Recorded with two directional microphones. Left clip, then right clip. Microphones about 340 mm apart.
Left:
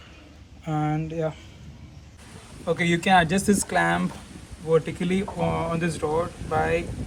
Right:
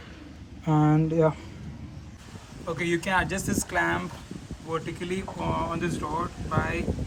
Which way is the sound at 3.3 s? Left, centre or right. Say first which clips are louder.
Left 6 dB; right.